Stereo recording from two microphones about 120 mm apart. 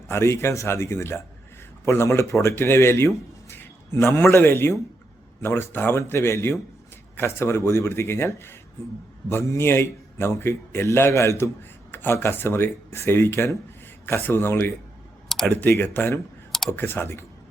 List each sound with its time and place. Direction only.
0.1 s speech: 25° left (ahead or behind)
15.3 s computer keyboard: 5° left (ahead or behind)
15.5 s speech: 15° left (ahead or behind)
16.5 s clicking: 5° left (ahead or behind)
16.7 s speech: 20° left (ahead or behind)